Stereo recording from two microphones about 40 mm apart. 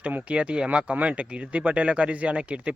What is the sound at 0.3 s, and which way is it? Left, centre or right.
Speech, right.